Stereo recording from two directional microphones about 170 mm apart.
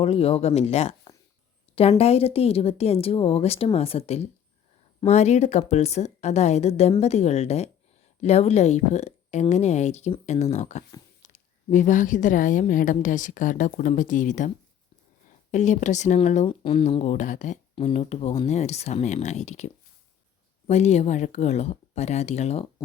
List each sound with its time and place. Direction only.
0.0 s a woman's voice: 35° left (ahead or behind)
15.5 s a woman's voice: 45° left (ahead or behind)
16.5 s speech: 30° left (ahead or behind)